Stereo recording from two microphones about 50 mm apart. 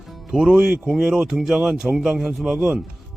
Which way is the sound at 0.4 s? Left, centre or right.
Right.